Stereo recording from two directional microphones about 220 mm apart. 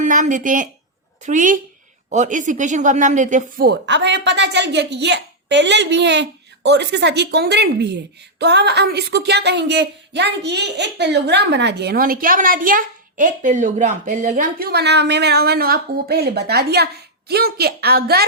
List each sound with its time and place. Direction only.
0.0 s speech: 35° right (ahead or behind)
3.7 s speech: 50° right (ahead or behind)